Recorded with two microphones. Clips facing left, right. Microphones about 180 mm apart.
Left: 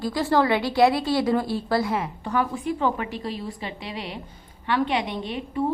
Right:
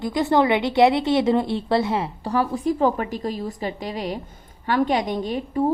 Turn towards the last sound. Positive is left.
turn(degrees=-45)  # may be behind; listen again after turning